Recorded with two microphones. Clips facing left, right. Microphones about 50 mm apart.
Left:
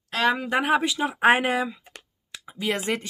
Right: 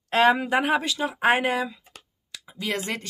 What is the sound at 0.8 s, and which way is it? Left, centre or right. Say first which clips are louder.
Speech: left 2 dB; centre.